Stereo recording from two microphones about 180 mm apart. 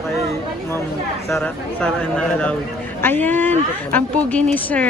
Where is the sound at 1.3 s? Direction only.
5° left (ahead or behind).